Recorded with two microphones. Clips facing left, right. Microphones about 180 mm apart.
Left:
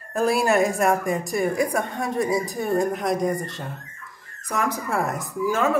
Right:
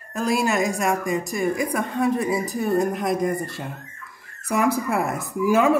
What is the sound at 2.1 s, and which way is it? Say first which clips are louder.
A woman's voice: even; centre (ahead or behind).